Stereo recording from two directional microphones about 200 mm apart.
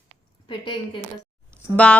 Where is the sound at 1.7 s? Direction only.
5° left (ahead or behind).